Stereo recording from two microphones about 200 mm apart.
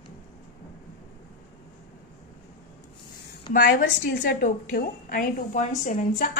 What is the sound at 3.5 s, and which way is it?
A woman's voice, 45° left (ahead or behind).